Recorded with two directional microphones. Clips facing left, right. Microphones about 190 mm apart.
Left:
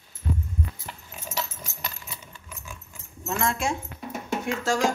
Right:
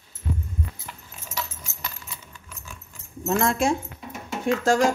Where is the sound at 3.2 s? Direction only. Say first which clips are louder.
Right 5 dB; 40° right (ahead or behind).